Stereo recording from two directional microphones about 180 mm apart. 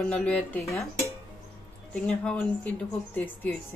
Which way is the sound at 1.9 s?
5° left (ahead or behind).